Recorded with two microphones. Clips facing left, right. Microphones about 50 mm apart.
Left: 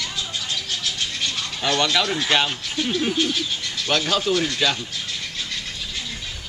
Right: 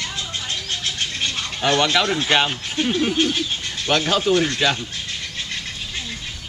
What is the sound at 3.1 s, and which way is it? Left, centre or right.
Speech, right.